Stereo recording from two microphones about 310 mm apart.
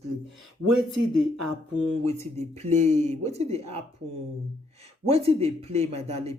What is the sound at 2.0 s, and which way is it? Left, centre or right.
Speech, right.